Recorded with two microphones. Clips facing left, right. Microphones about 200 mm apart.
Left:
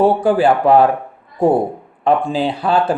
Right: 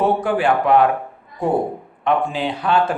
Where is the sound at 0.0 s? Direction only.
30° left (ahead or behind).